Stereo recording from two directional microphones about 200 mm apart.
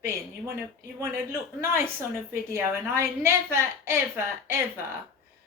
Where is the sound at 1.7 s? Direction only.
10° right (ahead or behind).